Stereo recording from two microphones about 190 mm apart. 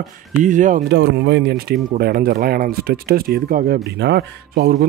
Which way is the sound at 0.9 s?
65° right (ahead or behind).